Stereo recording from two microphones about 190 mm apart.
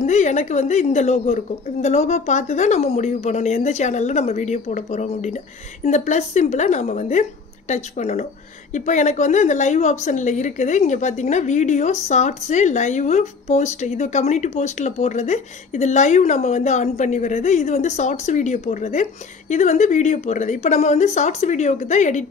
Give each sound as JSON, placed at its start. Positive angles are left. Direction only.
{"t": 0.0, "sound": "a woman's voice", "side_deg": 40}